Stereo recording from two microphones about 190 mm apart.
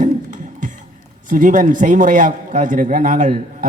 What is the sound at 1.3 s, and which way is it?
A man's voice, 45° right (ahead or behind).